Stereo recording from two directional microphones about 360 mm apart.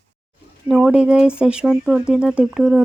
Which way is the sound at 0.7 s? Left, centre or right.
Centre.